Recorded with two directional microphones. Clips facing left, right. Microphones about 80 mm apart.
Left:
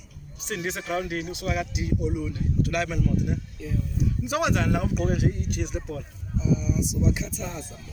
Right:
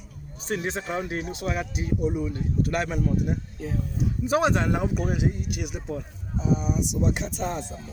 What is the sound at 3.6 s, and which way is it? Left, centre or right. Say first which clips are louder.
Speech: right 1 dB; right.